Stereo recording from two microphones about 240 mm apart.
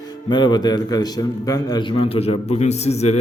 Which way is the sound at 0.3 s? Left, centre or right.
Centre.